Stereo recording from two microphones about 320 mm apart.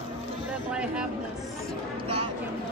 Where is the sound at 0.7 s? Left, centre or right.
Centre.